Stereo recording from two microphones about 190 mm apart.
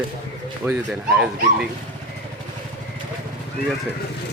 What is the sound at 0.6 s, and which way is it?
Speech, 5° right (ahead or behind).